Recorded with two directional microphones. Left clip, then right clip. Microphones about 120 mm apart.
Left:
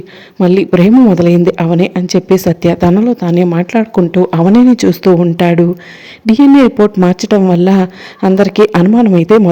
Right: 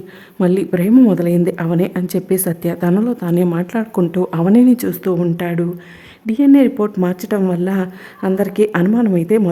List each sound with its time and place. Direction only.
0.3 s speech: 25° left (ahead or behind)
0.7 s a woman's voice: 40° left (ahead or behind)
1.1 s speech: 25° left (ahead or behind)
5.4 s a woman's voice: 40° left (ahead or behind)
6.6 s a woman's voice: 30° left (ahead or behind)